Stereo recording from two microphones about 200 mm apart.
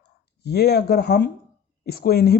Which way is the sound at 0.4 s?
55° left (ahead or behind).